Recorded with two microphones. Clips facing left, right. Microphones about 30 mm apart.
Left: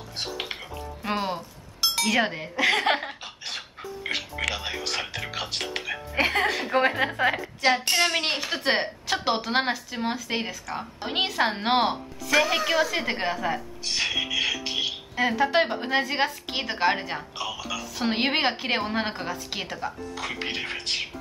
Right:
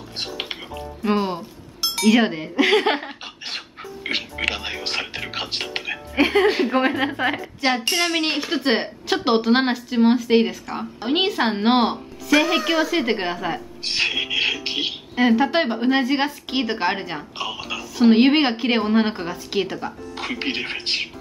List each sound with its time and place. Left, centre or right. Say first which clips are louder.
0.2 s music: right 3 dB; right
1.0 s speech: right 6 dB; centre
3.4 s dog: right 3 dB; right
5.3 s music: right 4 dB; right
6.1 s music: right 6 dB; centre
6.4 s a woman's voice: right 7 dB; centre
6.7 s a woman's voice: right 3 dB; centre
13.8 s a sound: right 4 dB; right
15.1 s speech: right 4 dB; centre
17.4 s speech: right 5 dB; right
17.9 s a woman's voice: right 10 dB; centre
20.2 s a sound: right 6 dB; right